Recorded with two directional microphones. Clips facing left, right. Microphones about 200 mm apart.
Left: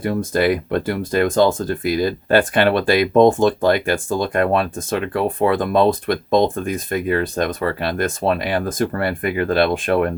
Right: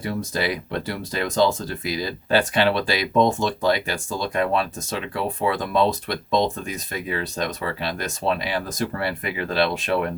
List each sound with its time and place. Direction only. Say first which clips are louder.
0.0 s speech: left 7 dB; 50° left (ahead or behind)